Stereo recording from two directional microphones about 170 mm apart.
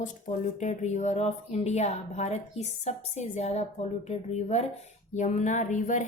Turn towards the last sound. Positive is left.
turn(degrees=45)  # may be behind; listen again after turning